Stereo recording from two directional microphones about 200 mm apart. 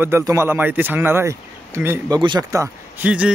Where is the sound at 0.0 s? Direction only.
15° right (ahead or behind).